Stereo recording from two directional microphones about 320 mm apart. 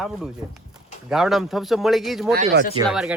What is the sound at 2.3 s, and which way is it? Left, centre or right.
Speech, right.